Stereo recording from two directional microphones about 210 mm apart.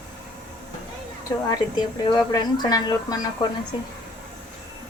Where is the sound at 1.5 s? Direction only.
20° left (ahead or behind).